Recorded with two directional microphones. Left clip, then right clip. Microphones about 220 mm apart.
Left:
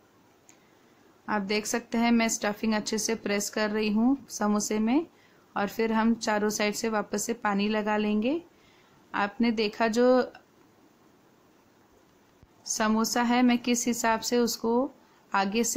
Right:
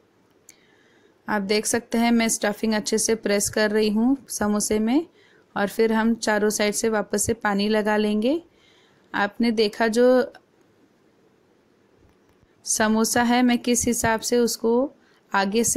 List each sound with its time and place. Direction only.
1.2 s a woman's voice: 20° right (ahead or behind)
12.6 s a woman's voice: 20° right (ahead or behind)